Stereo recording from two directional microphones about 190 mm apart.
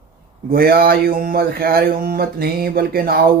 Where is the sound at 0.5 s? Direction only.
50° right (ahead or behind).